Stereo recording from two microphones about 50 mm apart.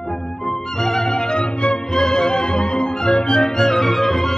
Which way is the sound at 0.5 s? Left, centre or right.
Centre.